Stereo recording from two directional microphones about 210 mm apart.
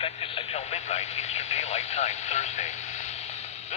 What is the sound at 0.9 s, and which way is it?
Speech, 30° left (ahead or behind).